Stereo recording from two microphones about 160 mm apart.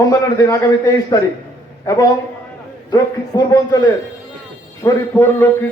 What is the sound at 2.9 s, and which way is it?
A man's voice, 25° left (ahead or behind).